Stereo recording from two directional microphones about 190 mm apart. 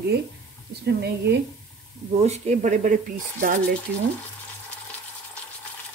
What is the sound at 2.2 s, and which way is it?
Speech, 35° right (ahead or behind).